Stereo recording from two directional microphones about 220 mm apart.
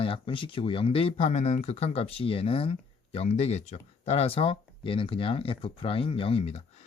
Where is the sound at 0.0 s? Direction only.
25° left (ahead or behind).